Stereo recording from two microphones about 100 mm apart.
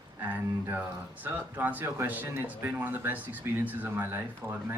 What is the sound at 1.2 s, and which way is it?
Speech, 20° right (ahead or behind).